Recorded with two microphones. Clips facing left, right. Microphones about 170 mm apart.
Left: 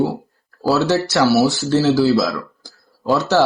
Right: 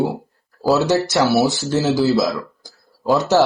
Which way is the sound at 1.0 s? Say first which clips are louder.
Left 1 dB; 20° right (ahead or behind).